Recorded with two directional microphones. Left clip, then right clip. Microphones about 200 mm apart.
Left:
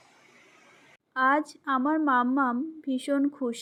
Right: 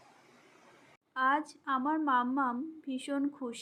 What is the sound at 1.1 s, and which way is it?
A woman's voice, 25° left (ahead or behind).